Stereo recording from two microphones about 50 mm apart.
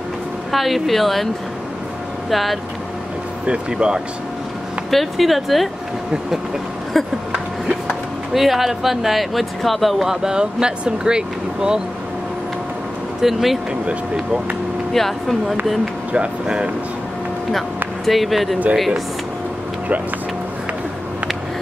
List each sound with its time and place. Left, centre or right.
0.5 s speech: centre
2.3 s speech: centre
3.4 s speech: centre
4.9 s speech: centre
7.6 s speech: centre
13.2 s speech: centre
14.9 s speech: centre
16.1 s speech: right
18.0 s speech: centre